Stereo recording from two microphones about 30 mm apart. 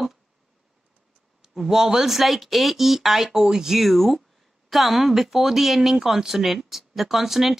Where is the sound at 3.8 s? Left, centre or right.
Centre.